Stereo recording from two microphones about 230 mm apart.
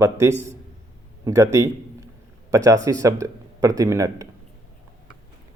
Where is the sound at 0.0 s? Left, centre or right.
Centre.